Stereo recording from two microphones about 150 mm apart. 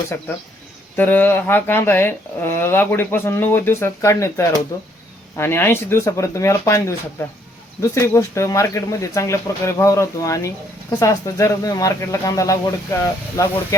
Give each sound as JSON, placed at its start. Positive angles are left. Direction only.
{"t": 0.9, "sound": "speech", "side_deg": 10}